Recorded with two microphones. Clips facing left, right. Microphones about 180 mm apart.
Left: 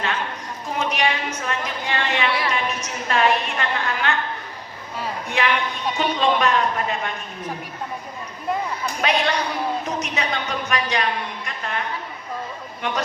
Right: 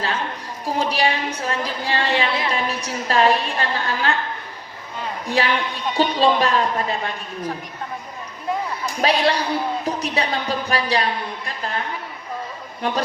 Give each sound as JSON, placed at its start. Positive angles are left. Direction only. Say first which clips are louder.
{"t": 0.6, "sound": "a woman's voice", "louder": "right 2 dB", "side_deg": -35}
{"t": 5.3, "sound": "a woman's voice", "louder": "right 2 dB", "side_deg": -35}
{"t": 9.0, "sound": "a woman's voice", "louder": "right 3 dB", "side_deg": -35}
{"t": 12.8, "sound": "a woman's voice", "louder": "right 3 dB", "side_deg": -35}